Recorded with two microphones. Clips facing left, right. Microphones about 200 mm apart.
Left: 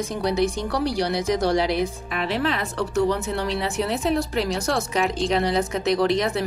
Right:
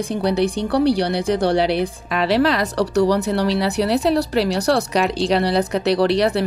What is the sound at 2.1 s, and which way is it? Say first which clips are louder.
Speech: right 8 dB; 90° right.